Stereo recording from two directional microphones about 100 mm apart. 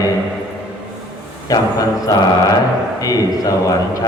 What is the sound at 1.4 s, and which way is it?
A man's voice, 40° left (ahead or behind).